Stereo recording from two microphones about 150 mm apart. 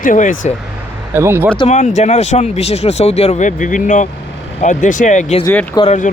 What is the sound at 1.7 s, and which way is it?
Speech, 50° left (ahead or behind).